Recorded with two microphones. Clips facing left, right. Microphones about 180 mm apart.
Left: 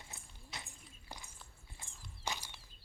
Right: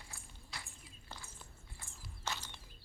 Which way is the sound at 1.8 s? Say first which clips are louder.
Left 1 dB; 15° left (ahead or behind).